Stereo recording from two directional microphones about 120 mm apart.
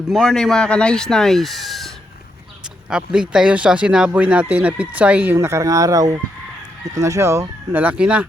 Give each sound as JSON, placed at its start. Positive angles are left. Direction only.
{"t": 0.1, "sound": "speech", "side_deg": 5}
{"t": 2.9, "sound": "speech", "side_deg": -5}